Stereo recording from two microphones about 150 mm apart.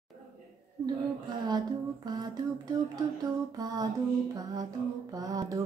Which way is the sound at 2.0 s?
25° right (ahead or behind).